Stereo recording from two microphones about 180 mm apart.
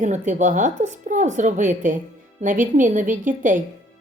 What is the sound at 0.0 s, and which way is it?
Speech, 40° right (ahead or behind).